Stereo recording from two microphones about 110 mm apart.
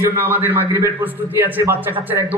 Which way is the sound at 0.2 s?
20° right (ahead or behind).